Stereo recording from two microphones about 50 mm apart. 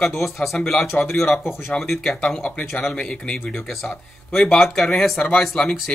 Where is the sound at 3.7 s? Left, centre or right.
Centre.